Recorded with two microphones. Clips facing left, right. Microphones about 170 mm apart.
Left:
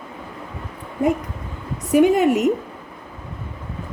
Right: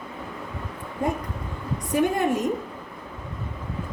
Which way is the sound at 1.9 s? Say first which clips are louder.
Left 8 dB; 80° left.